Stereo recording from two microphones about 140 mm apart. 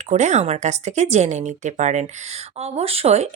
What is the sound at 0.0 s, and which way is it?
Speech, 55° right (ahead or behind).